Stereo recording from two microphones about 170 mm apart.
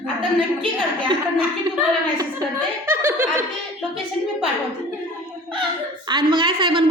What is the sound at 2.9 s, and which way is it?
Snicker, 15° right (ahead or behind).